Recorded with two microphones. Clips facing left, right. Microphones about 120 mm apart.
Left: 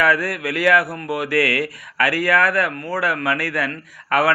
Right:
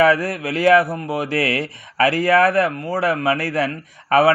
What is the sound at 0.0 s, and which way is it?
Speech, 25° right (ahead or behind).